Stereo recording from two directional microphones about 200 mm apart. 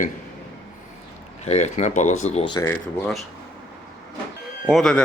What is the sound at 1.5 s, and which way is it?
Speech, 35° left (ahead or behind).